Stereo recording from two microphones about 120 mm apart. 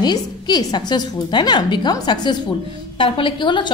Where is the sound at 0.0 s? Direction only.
35° left (ahead or behind).